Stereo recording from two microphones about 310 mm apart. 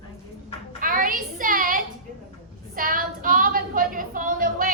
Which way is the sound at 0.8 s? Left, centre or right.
Right.